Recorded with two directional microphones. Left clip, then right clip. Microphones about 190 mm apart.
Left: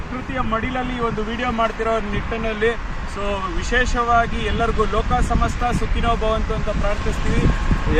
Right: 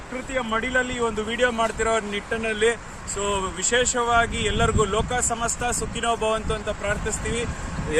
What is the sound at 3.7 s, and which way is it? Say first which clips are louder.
Speech: left 3 dB; 45° right (ahead or behind).